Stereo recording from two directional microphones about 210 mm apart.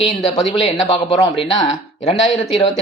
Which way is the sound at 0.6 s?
30° left (ahead or behind).